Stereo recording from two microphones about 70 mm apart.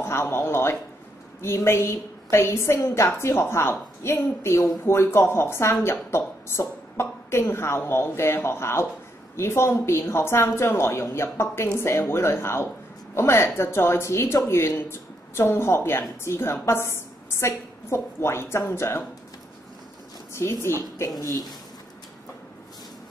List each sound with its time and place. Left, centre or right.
0.0 s a woman's voice: left
20.3 s a woman's voice: left